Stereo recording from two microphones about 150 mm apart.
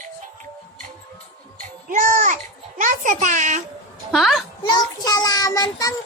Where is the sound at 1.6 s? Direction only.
65° right (ahead or behind).